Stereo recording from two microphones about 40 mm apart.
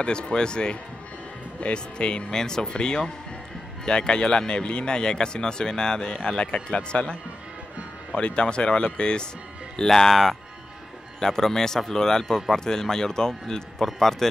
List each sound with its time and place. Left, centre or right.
0.0 s speech: left
9.8 s speech: centre